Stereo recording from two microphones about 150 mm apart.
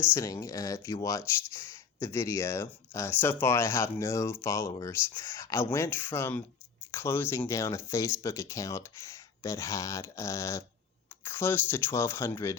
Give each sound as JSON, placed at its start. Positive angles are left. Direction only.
{"t": 0.1, "sound": "speech", "side_deg": 20}